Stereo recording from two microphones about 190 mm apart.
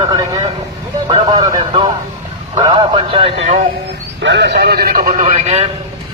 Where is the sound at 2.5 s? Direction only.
25° right (ahead or behind).